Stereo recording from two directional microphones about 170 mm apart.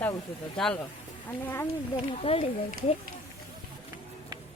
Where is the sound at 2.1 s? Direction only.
35° left (ahead or behind).